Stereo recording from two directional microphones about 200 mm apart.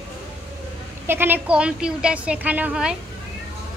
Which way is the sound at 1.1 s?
10° right (ahead or behind).